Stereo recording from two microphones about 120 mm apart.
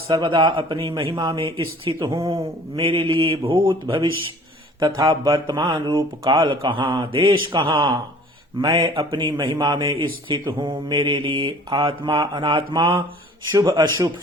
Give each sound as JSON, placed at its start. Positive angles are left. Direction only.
{"t": 0.1, "sound": "speech", "side_deg": -40}